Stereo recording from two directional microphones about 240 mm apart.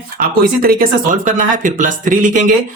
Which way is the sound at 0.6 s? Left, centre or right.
Right.